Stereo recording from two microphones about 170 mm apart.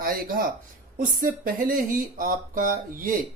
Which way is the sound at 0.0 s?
55° right (ahead or behind).